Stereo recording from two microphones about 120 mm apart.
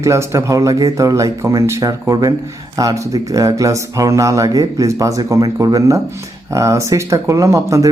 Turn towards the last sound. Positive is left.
turn(degrees=-25)  # may be behind; listen again after turning